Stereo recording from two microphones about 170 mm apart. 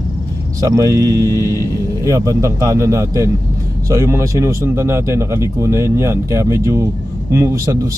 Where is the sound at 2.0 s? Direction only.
20° right (ahead or behind).